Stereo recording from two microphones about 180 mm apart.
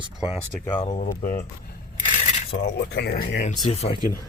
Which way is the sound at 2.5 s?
65° left (ahead or behind).